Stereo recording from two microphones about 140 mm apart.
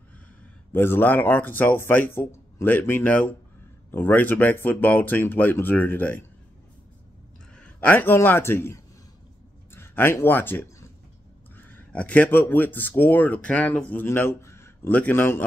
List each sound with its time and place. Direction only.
0.7 s speech: 15° left (ahead or behind)
7.5 s a man's voice: 10° left (ahead or behind)